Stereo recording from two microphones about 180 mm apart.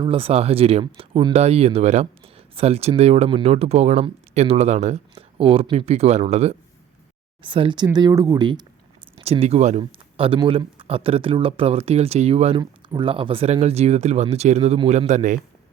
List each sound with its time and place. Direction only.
0.0 s speech: 30° right (ahead or behind)
9.2 s speech: 35° right (ahead or behind)